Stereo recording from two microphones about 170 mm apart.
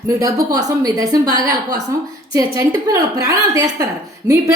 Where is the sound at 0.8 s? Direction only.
20° right (ahead or behind).